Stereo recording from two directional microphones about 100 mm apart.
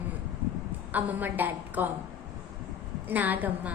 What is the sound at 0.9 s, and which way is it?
Speech, 20° right (ahead or behind).